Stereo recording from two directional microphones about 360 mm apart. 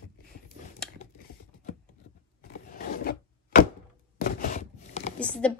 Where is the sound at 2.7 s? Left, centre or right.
Left.